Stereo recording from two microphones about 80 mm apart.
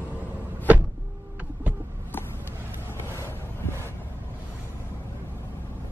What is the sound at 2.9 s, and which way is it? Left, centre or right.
Vehicle, left.